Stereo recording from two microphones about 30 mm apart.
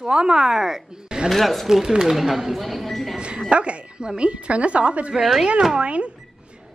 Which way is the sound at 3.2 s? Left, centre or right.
Right.